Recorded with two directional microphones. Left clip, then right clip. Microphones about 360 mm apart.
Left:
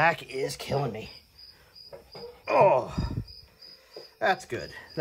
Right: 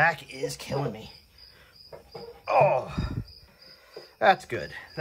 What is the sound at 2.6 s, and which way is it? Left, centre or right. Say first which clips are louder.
Speech: left 2 dB; centre.